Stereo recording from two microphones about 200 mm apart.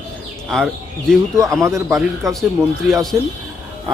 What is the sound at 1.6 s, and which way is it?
Speech, 15° right (ahead or behind).